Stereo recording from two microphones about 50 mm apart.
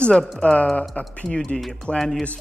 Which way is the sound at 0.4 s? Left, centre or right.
Left.